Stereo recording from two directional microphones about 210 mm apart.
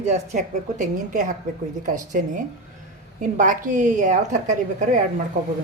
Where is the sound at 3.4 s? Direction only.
40° right (ahead or behind).